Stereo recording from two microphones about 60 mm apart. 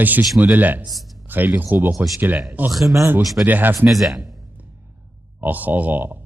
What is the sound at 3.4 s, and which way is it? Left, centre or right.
Speech, right.